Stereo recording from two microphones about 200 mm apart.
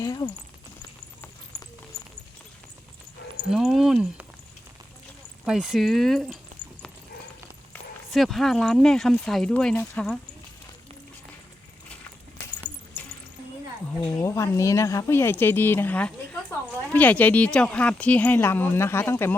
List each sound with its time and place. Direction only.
0.0 s a sound: 20° left (ahead or behind)
3.5 s speech: centre (ahead or behind)
5.5 s speech: centre (ahead or behind)
7.7 s speech: centre (ahead or behind)
14.0 s speech: 15° left (ahead or behind)